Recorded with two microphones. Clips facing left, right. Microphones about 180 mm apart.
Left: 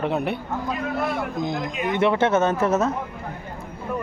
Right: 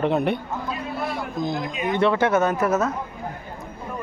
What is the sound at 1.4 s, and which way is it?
Speech, 20° left (ahead or behind).